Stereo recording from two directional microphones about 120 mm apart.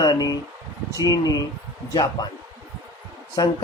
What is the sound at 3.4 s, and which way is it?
Speech, 30° left (ahead or behind).